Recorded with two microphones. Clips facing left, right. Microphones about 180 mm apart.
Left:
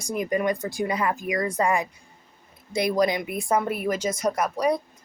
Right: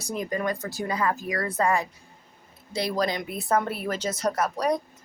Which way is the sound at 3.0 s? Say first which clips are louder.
Left 4 dB; 15° left (ahead or behind).